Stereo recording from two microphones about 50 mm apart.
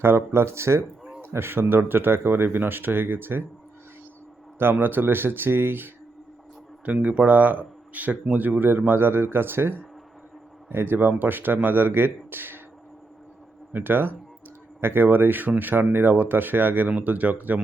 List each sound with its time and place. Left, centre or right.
0.0 s speech: right
4.5 s speech: right
6.8 s speech: right
13.7 s speech: right